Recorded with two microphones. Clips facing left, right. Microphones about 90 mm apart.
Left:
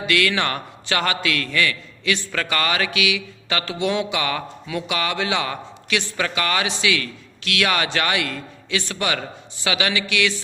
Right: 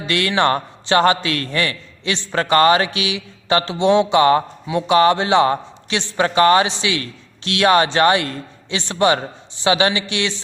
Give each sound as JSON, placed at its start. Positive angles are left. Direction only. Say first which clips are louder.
{"t": 0.0, "sound": "a man's voice", "louder": "right 3 dB", "side_deg": -30}